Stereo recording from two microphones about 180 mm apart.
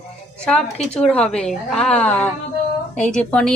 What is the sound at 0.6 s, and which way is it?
Speech, 35° left (ahead or behind).